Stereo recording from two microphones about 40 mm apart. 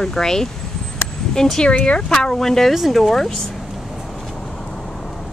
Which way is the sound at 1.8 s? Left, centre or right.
Left.